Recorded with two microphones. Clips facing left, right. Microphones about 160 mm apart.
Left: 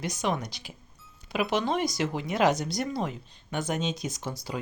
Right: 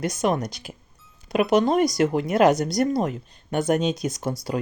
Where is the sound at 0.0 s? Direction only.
50° right (ahead or behind).